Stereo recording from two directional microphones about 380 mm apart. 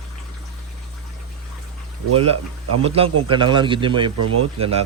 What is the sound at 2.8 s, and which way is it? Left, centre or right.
Speech, centre.